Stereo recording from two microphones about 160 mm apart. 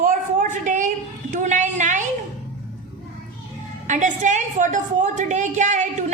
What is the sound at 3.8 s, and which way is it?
A woman's voice, 50° right (ahead or behind).